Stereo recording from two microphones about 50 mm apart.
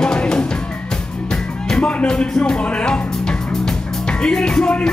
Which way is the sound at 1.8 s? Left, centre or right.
Left.